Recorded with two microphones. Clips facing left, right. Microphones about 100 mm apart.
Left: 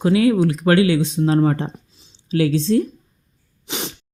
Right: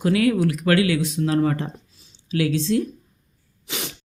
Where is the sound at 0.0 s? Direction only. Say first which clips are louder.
Left 3 dB; 25° left (ahead or behind).